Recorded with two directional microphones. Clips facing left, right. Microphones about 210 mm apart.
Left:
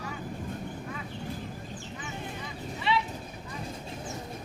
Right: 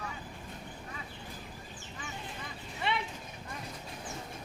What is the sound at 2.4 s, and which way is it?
Vehicle, 55° right (ahead or behind).